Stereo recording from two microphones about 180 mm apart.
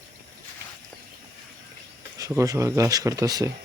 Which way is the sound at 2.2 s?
20° right (ahead or behind).